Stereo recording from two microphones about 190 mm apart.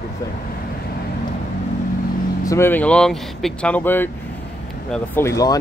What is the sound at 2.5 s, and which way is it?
Speech, 10° left (ahead or behind).